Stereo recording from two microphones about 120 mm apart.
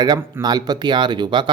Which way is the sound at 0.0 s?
35° right (ahead or behind).